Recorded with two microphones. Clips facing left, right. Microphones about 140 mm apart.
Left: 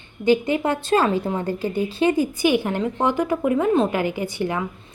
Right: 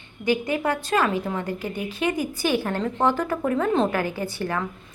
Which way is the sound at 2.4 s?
15° left (ahead or behind).